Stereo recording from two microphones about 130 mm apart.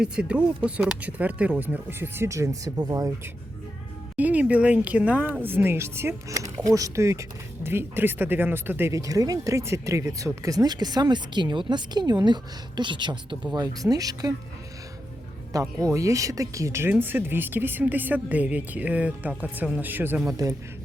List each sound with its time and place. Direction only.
0.0 s speech: 5° right (ahead or behind); by 3.1 s 30° right (ahead or behind)
4.2 s speech: 10° right (ahead or behind); by 14.3 s 30° right (ahead or behind)
15.8 s speech: 25° right (ahead or behind)